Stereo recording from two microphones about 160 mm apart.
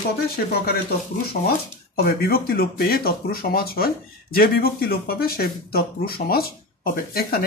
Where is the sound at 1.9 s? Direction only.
70° left (ahead or behind).